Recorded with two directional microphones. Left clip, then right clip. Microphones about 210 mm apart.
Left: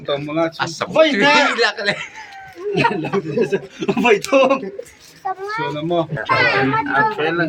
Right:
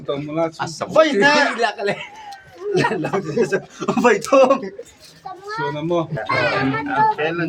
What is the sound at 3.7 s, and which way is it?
Speech, 15° right (ahead or behind).